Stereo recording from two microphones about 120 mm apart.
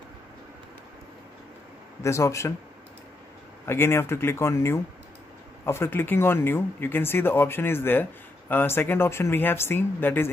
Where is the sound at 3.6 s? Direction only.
20° left (ahead or behind).